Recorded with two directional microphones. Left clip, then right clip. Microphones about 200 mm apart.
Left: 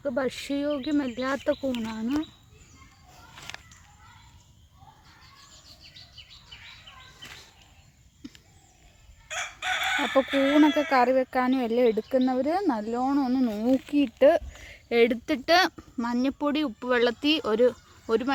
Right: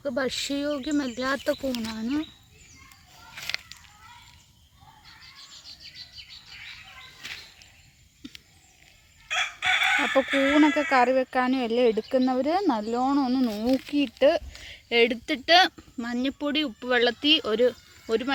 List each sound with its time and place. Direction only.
0.0 s speech: centre (ahead or behind)
9.3 s chicken: 50° left (ahead or behind)
10.2 s speech: 50° left (ahead or behind)
10.6 s speech: centre (ahead or behind)